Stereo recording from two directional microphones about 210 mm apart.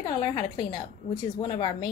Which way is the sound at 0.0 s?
20° left (ahead or behind).